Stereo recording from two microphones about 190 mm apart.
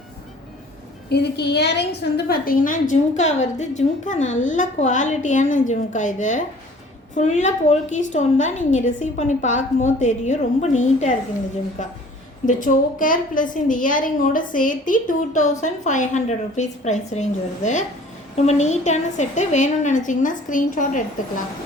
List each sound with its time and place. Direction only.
1.1 s a woman's voice: 60° left (ahead or behind); by 21.0 s 45° left (ahead or behind)